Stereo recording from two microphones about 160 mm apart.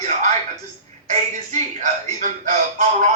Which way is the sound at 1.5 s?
50° right (ahead or behind).